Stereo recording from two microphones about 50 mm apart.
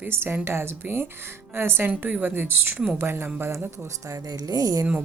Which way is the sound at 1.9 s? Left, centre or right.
Right.